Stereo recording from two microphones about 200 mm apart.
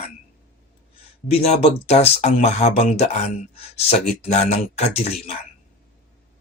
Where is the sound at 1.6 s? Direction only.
30° left (ahead or behind).